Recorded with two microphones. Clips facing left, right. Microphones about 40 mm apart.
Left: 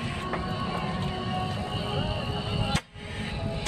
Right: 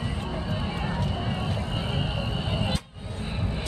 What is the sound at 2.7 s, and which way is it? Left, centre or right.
Vehicle, left.